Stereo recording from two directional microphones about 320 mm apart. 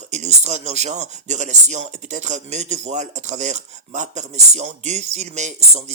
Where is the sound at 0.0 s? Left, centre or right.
Right.